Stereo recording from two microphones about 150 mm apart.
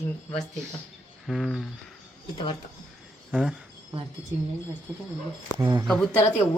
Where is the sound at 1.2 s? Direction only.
Centre (ahead or behind).